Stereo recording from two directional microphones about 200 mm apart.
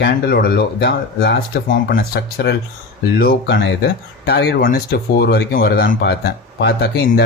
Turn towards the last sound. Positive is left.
turn(degrees=55)  # may be behind; listen again after turning